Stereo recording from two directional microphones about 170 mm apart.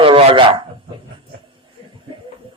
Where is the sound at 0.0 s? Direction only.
30° right (ahead or behind).